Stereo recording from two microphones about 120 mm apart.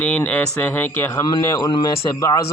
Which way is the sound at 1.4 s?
25° left (ahead or behind).